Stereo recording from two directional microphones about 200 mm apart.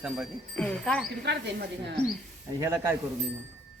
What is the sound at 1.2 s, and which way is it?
Speech, 55° right (ahead or behind).